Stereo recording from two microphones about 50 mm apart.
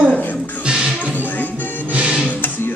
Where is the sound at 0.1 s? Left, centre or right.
Left.